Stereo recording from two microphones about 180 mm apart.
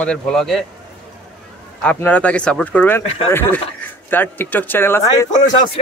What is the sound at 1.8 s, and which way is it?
Speech, 5° left (ahead or behind).